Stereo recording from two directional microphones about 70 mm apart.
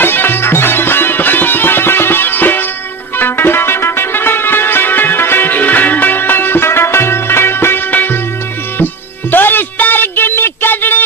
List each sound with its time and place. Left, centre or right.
0.0 s music: left
9.3 s music: left